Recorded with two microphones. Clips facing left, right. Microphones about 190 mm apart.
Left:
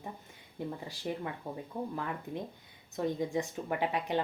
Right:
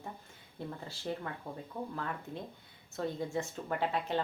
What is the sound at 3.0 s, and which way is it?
Speech, 15° left (ahead or behind).